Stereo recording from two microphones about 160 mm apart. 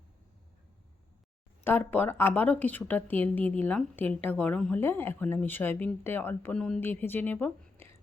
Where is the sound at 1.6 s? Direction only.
10° left (ahead or behind).